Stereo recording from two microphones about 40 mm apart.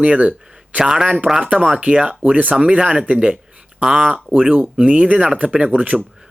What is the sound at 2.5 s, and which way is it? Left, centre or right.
Speech, right.